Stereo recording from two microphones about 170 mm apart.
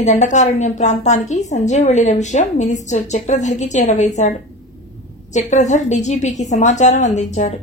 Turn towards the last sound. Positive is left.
turn(degrees=40)  # may be behind; listen again after turning